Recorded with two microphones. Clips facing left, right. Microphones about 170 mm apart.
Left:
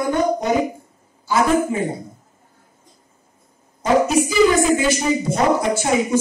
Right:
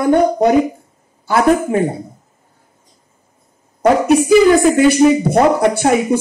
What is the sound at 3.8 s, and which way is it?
Speech, 60° right (ahead or behind).